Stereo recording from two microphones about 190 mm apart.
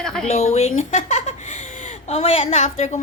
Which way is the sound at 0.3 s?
35° left (ahead or behind).